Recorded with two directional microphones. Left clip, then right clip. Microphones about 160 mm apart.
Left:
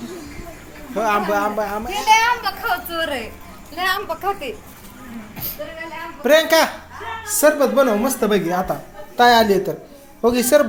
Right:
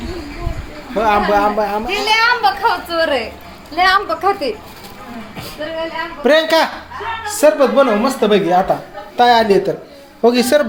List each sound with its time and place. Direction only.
0.9 s a woman's voice: centre (ahead or behind)
1.9 s a child's voice: 55° right (ahead or behind)
2.9 s a woman's voice: 25° right (ahead or behind)
4.1 s a child's voice: 50° right (ahead or behind)
6.2 s a man's voice: 10° right (ahead or behind)
7.4 s a woman's voice: 10° left (ahead or behind); by 10.7 s 10° right (ahead or behind)